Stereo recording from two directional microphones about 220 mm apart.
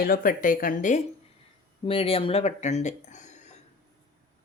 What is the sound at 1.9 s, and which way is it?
Speech, 25° left (ahead or behind).